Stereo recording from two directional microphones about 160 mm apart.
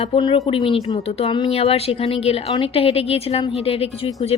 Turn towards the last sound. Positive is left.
turn(degrees=40)  # may be behind; listen again after turning